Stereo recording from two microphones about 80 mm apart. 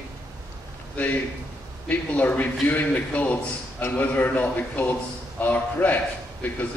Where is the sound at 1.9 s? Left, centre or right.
Centre.